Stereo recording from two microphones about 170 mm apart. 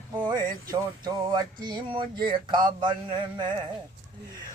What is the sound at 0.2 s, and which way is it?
Male singing, 25° right (ahead or behind).